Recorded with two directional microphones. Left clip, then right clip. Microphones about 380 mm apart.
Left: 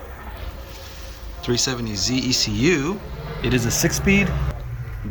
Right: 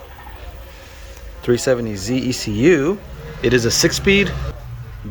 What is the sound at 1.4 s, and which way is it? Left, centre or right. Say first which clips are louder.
Speech: right 6 dB; centre.